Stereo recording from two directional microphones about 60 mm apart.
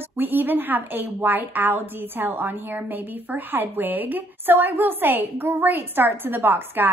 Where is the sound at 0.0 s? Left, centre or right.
Right.